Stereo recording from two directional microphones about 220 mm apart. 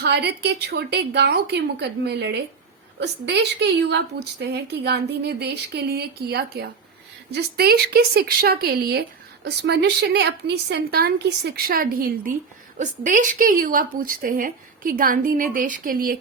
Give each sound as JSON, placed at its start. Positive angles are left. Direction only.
{"t": 0.0, "sound": "speech", "side_deg": -50}